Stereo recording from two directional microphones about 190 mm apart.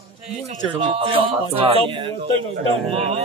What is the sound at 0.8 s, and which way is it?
Speech, 30° right (ahead or behind).